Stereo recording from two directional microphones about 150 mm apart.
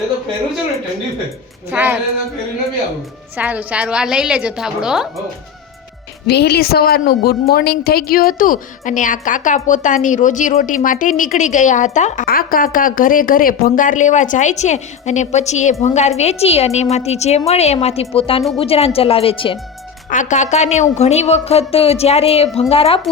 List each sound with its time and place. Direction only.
1.7 s a woman's voice: 10° right (ahead or behind)
3.3 s a woman's voice: 10° right (ahead or behind)
6.2 s a woman's voice: 90° left; by 12.2 s 55° left (ahead or behind)
12.2 s a woman's voice: 75° left (ahead or behind); by 19.5 s 40° left (ahead or behind)
20.1 s a woman's voice: 55° left (ahead or behind); by 23.0 s 40° left (ahead or behind)